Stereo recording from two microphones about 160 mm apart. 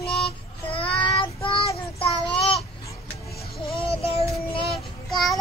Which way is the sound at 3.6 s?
35° left (ahead or behind).